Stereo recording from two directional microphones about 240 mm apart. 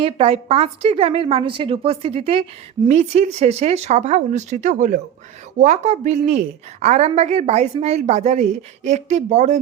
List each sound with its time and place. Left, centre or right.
0.0 s a woman's voice: right